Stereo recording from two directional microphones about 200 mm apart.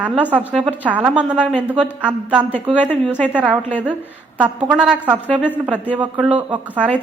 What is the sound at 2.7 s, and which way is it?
Speech, 10° left (ahead or behind).